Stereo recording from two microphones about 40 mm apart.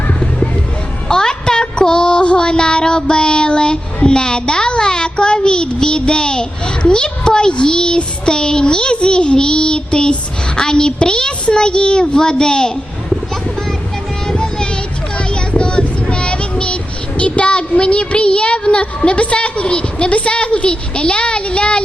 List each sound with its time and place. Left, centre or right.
1.0 s a sound: centre
14.3 s child singing: left
15.2 s speech: left